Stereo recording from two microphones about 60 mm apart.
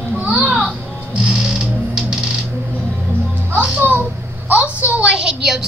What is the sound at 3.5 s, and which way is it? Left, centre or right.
Music, right.